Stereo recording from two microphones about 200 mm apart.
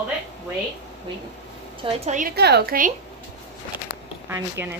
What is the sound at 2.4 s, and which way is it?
Speech, 55° right (ahead or behind).